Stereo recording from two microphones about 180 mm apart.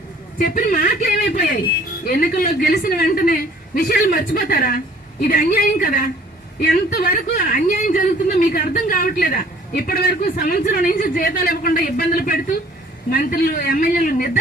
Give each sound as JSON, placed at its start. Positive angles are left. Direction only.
{"t": 0.3, "sound": "speech", "side_deg": 50}